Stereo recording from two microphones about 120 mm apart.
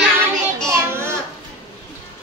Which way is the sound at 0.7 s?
20° right (ahead or behind).